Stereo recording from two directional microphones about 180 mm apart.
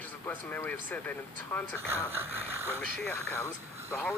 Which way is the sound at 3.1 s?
15° left (ahead or behind).